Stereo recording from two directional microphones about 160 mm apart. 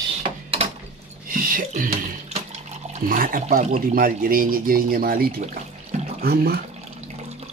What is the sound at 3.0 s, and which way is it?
Speech, 60° right (ahead or behind).